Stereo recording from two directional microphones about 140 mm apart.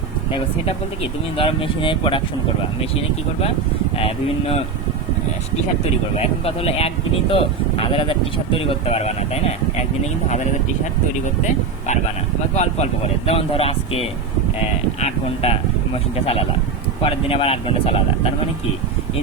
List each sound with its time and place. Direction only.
1.4 s speech: 40° left (ahead or behind)
3.9 s speech: 45° left (ahead or behind)
6.1 s speech: 45° left (ahead or behind)
12.5 s speech: 50° left (ahead or behind)